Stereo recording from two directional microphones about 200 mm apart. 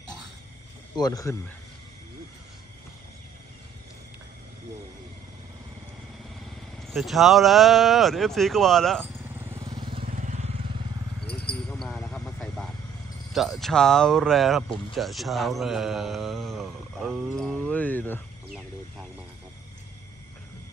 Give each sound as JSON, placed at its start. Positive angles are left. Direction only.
{"t": 0.9, "sound": "speech", "side_deg": 20}
{"t": 6.9, "sound": "speech", "side_deg": 0}
{"t": 9.0, "sound": "vehicle", "side_deg": -10}
{"t": 10.0, "sound": "vehicle", "side_deg": -40}
{"t": 11.2, "sound": "a sound", "side_deg": 55}
{"t": 11.7, "sound": "cricket", "side_deg": 0}
{"t": 12.1, "sound": "vehicle", "side_deg": 5}
{"t": 13.3, "sound": "speech", "side_deg": 0}